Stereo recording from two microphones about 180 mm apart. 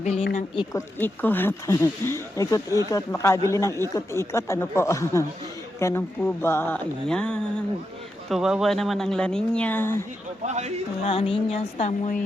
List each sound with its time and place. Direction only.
0.0 s music: 35° left (ahead or behind)
0.3 s speech: 25° left (ahead or behind)
10.4 s speech: 40° right (ahead or behind)
11.0 s music: 30° left (ahead or behind)